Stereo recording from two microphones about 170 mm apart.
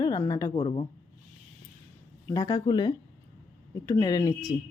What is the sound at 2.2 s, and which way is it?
Speech, 20° left (ahead or behind).